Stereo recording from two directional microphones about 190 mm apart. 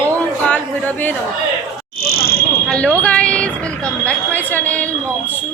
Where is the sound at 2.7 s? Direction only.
5° left (ahead or behind).